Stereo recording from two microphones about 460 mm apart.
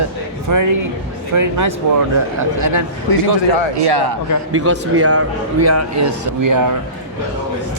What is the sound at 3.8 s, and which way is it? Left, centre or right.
Speech, right.